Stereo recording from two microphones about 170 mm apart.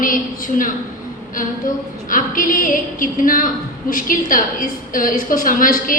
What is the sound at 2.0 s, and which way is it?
A woman's voice, 55° left (ahead or behind).